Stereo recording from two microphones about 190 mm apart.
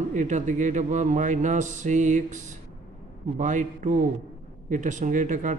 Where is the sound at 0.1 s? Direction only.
40° right (ahead or behind).